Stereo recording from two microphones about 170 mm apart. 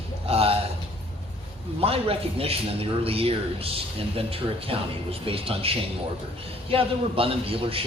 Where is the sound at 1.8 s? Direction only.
35° right (ahead or behind).